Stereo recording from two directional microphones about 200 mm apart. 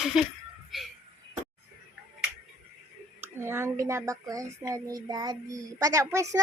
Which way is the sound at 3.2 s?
10° right (ahead or behind).